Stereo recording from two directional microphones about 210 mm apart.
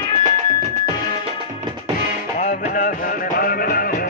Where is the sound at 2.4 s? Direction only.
40° left (ahead or behind).